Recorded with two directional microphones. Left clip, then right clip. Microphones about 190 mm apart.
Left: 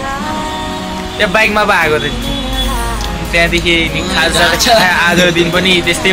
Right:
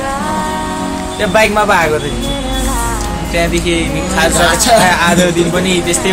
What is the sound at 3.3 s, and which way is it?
Speech, 15° right (ahead or behind).